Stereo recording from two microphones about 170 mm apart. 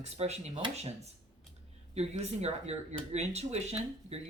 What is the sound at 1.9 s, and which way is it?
Speech, 40° right (ahead or behind).